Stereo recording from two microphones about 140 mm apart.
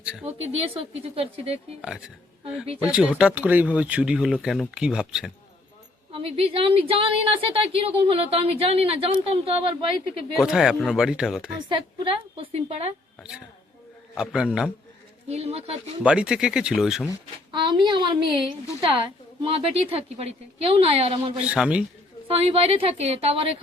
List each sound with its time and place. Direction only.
0.0 s speech: 10° right (ahead or behind)
0.3 s a woman's voice: 45° right (ahead or behind)
1.8 s speech: 5° right (ahead or behind)
6.1 s a woman's voice: 45° right (ahead or behind)
10.3 s speech: centre (ahead or behind)
11.7 s a woman's voice: 40° right (ahead or behind)
14.2 s speech: 5° right (ahead or behind)
15.3 s a woman's voice: 45° right (ahead or behind)
16.0 s speech: 5° right (ahead or behind)
17.5 s a woman's voice: 35° right (ahead or behind)
19.4 s a woman's voice: 40° right (ahead or behind)
21.4 s speech: 10° right (ahead or behind)
22.3 s a woman's voice: 45° right (ahead or behind)